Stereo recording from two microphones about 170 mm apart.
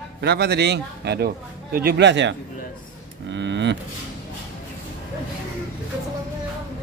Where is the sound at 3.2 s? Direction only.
90° right.